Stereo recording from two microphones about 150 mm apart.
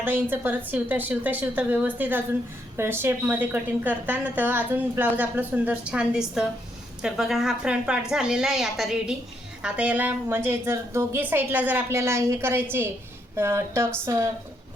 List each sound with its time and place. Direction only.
0.0 s a woman's voice: 15° right (ahead or behind)